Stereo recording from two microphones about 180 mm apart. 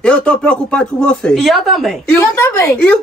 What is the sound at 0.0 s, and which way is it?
Speech, 5° left (ahead or behind).